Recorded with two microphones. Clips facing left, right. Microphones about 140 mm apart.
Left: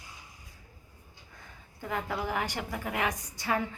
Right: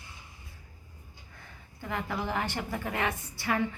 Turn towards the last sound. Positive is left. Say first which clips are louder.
# even
turn(degrees=20)  # may be behind; listen again after turning